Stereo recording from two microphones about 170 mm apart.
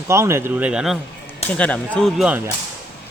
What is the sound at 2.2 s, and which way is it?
Speech, 10° right (ahead or behind).